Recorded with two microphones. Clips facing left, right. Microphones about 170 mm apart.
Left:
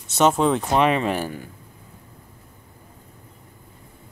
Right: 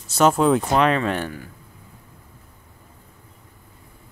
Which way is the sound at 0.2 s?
Centre (ahead or behind).